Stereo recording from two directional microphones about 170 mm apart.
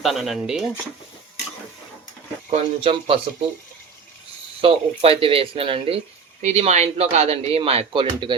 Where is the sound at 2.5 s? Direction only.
35° right (ahead or behind).